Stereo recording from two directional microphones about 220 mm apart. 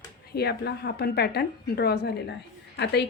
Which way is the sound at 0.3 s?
50° left (ahead or behind).